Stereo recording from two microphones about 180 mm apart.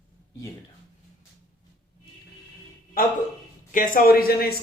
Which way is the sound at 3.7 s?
50° left (ahead or behind).